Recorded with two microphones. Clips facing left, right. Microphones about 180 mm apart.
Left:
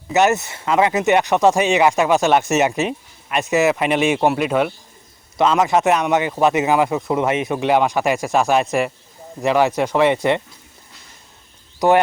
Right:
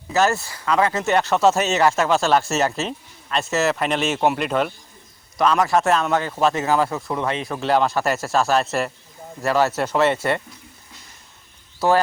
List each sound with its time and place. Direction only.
0.1 s speech: 20° left (ahead or behind)
5.4 s speech: 20° left (ahead or behind)
11.8 s speech: 20° left (ahead or behind)